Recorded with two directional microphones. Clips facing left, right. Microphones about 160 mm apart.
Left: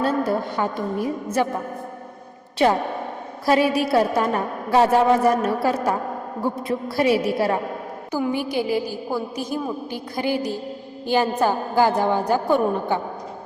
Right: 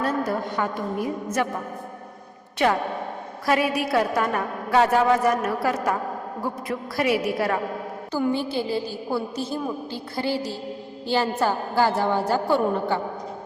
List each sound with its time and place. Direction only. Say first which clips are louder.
0.0 s a woman's voice: left 3 dB; 30° left (ahead or behind)
2.6 s a woman's voice: left 3 dB; 30° left (ahead or behind)
8.1 s a woman's voice: left 1 dB; 10° left (ahead or behind)